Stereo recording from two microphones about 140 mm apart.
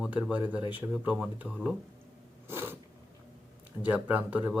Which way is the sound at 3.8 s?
10° right (ahead or behind).